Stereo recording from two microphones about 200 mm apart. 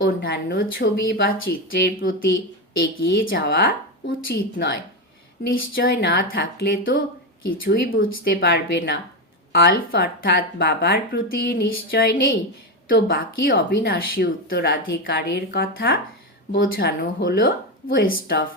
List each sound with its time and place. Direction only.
0.0 s speech: 50° left (ahead or behind)